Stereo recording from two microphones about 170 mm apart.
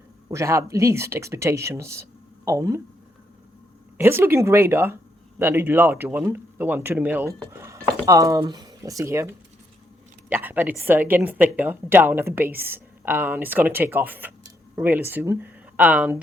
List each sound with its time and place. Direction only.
0.3 s a woman's voice: 15° right (ahead or behind)
3.9 s a woman's voice: 15° right (ahead or behind)